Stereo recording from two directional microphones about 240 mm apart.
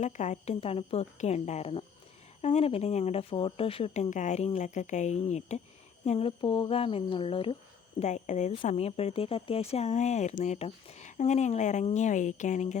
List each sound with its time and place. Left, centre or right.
0.0 s speech: left